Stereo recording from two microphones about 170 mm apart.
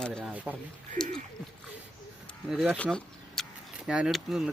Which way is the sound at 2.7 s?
5° left (ahead or behind).